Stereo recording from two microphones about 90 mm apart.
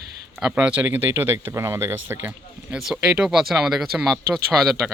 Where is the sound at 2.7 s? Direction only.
5° right (ahead or behind).